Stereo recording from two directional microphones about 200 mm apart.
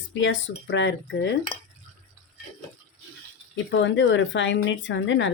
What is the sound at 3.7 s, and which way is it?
Speech, 65° left (ahead or behind).